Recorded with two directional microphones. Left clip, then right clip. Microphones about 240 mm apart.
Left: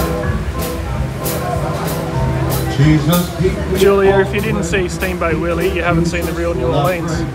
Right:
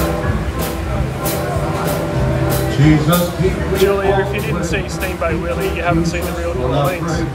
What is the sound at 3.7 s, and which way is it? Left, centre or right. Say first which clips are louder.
Speech: left 4 dB; left.